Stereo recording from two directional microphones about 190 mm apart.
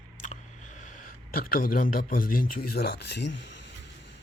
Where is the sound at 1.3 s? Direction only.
50° left (ahead or behind).